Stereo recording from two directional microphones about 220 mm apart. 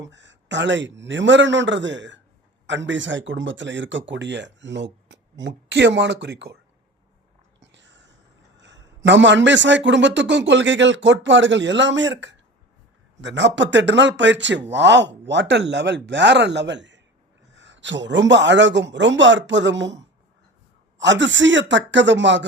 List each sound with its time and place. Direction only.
0.0 s speech: 55° right (ahead or behind)
7.6 s a sound: 55° right (ahead or behind)
8.5 s speech: 55° right (ahead or behind)
21.0 s speech: 55° right (ahead or behind)